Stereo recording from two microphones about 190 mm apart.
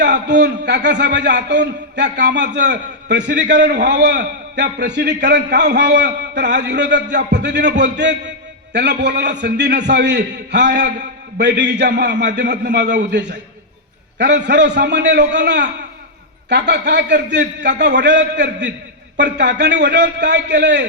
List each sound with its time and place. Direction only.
0.0 s a man's voice: 65° right (ahead or behind)